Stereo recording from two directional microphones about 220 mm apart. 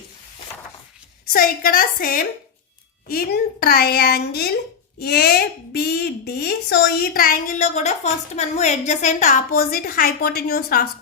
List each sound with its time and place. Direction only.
1.3 s a woman's voice: 40° left (ahead or behind)